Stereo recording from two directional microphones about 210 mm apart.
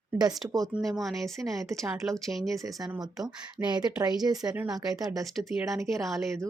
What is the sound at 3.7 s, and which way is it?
A woman's voice, 20° right (ahead or behind).